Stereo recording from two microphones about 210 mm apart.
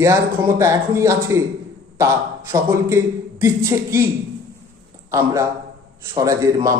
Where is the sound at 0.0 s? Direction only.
15° right (ahead or behind).